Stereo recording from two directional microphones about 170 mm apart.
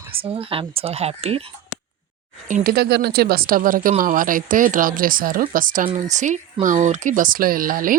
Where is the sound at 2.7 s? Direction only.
70° right (ahead or behind).